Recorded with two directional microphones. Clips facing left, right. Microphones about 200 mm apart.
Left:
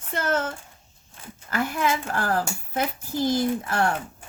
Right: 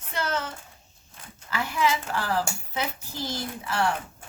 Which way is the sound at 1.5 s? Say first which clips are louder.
Left 1 dB; 50° left (ahead or behind).